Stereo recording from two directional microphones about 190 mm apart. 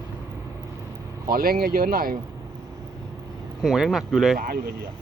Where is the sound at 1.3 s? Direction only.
50° right (ahead or behind).